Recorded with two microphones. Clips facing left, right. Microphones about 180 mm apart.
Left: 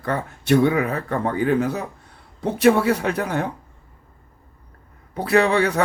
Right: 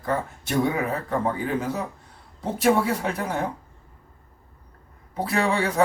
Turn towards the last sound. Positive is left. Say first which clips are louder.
# left 5 dB
turn(degrees=70)  # may be behind; listen again after turning